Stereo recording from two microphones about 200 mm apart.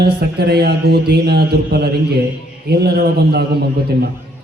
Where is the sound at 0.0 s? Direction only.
55° right (ahead or behind).